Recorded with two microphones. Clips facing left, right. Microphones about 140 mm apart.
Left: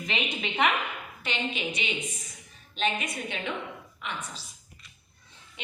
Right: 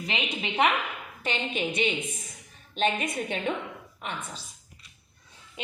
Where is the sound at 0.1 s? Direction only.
30° right (ahead or behind).